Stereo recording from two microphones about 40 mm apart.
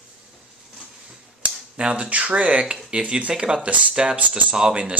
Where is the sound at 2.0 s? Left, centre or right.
Right.